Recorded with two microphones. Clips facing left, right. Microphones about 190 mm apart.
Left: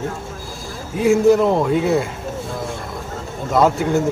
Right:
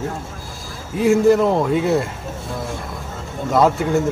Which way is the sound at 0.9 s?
Centre (ahead or behind).